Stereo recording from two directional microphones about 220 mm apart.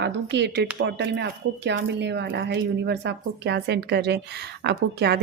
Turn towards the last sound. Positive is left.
turn(degrees=-50)  # may be behind; listen again after turning